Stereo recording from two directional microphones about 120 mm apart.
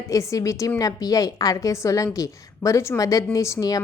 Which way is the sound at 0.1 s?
25° left (ahead or behind).